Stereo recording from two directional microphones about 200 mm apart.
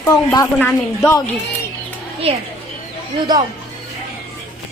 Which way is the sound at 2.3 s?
30° right (ahead or behind).